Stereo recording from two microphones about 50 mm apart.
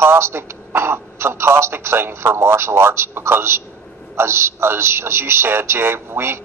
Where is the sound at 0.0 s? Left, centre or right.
Right.